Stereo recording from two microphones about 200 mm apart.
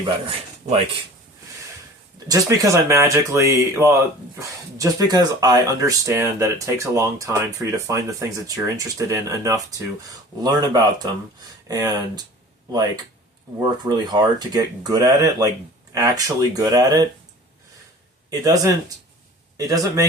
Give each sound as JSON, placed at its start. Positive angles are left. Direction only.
{"t": 0.0, "sound": "speech", "side_deg": -30}
{"t": 2.1, "sound": "speech", "side_deg": -20}
{"t": 13.6, "sound": "speech", "side_deg": -20}
{"t": 18.3, "sound": "speech", "side_deg": -20}